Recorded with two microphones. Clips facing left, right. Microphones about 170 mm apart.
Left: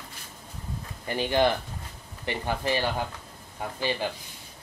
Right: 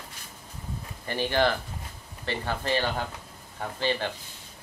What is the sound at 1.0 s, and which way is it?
Speech, 15° left (ahead or behind).